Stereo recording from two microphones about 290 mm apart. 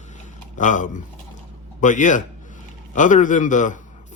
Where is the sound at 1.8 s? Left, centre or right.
Left.